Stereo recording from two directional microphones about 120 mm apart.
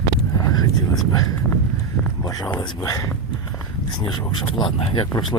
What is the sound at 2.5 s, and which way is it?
Speech, 35° left (ahead or behind).